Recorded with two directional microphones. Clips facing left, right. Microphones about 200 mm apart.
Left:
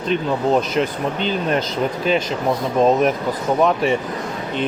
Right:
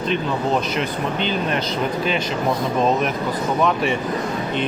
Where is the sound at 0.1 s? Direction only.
40° left (ahead or behind).